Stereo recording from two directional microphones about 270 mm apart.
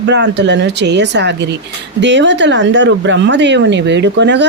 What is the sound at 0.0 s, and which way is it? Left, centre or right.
Speech, right.